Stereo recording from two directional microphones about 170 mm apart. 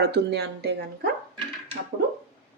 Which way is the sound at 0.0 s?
70° right (ahead or behind).